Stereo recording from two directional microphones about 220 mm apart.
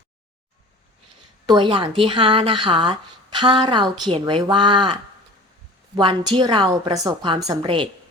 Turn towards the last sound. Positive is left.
turn(degrees=-20)  # may be behind; listen again after turning